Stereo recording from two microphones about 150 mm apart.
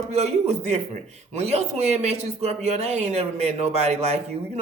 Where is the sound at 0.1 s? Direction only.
45° right (ahead or behind).